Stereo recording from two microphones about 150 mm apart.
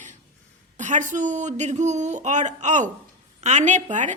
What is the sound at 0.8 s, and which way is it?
A woman's voice, 55° right (ahead or behind).